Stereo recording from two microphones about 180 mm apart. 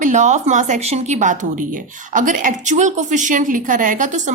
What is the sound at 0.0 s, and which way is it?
A woman's voice, 45° right (ahead or behind).